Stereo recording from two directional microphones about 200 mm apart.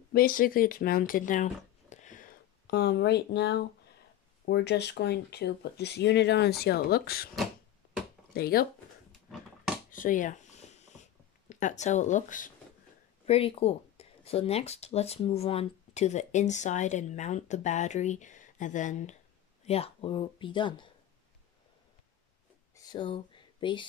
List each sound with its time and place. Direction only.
0.1 s speech: 45° left (ahead or behind)
8.4 s speech: 50° left (ahead or behind)
9.9 s speech: 40° left (ahead or behind)
10.9 s a sound: 35° left (ahead or behind)
13.2 s speech: 30° left (ahead or behind)
22.8 s a sound: 20° left (ahead or behind)